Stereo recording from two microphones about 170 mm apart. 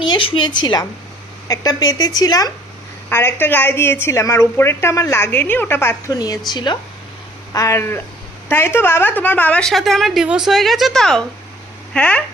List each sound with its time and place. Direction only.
0.0 s a woman's voice: 30° left (ahead or behind); by 12.2 s 10° left (ahead or behind)